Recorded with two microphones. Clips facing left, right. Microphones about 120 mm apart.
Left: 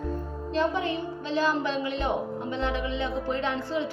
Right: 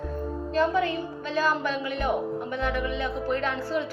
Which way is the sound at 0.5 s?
20° left (ahead or behind).